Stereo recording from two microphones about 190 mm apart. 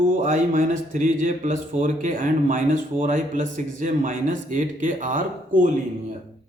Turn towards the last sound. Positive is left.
turn(degrees=-45)  # may be behind; listen again after turning